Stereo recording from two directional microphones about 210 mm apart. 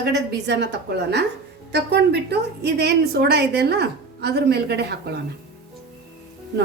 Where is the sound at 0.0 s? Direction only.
50° right (ahead or behind).